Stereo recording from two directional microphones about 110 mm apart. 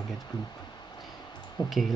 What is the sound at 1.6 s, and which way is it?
Speech, 40° left (ahead or behind).